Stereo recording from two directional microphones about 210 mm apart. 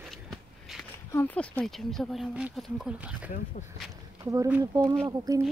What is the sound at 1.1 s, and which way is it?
Speech, 5° left (ahead or behind).